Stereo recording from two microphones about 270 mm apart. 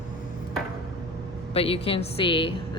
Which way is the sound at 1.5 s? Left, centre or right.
Left.